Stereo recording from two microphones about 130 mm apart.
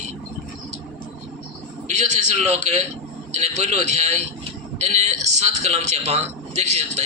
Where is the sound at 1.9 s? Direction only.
60° right (ahead or behind).